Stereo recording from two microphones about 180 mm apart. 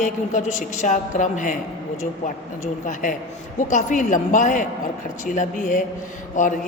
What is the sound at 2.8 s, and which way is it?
A woman's voice, 45° left (ahead or behind).